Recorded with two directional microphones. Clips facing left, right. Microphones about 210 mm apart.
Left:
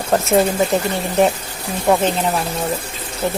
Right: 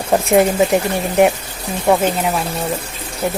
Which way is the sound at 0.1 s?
15° right (ahead or behind).